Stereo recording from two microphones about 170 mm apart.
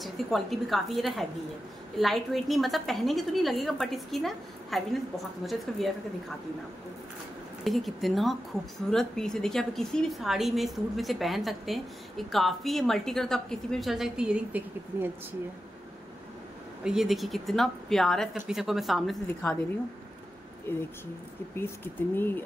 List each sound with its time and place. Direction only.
0.0 s a woman's voice: centre (ahead or behind)
7.6 s a woman's voice: centre (ahead or behind)
16.8 s a woman's voice: centre (ahead or behind)
20.7 s speech: 15° left (ahead or behind)
22.1 s speech: 10° left (ahead or behind)